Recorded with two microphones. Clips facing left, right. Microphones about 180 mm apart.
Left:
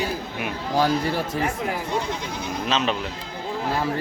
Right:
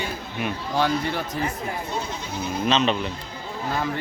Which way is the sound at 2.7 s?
5° left (ahead or behind).